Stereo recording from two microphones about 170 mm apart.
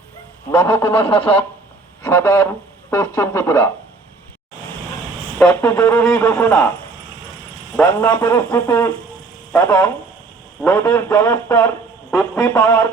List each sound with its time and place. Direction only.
0.5 s speech: 15° left (ahead or behind)
5.4 s speech: 5° left (ahead or behind)
7.8 s speech: 10° left (ahead or behind)